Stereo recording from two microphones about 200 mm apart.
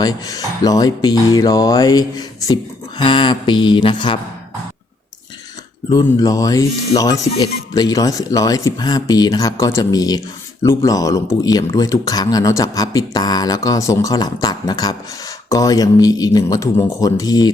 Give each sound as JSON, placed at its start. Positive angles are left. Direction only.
{"t": 0.0, "sound": "speech", "side_deg": 20}
{"t": 5.9, "sound": "speech", "side_deg": 20}